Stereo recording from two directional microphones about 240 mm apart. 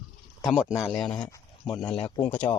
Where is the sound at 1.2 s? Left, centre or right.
Centre.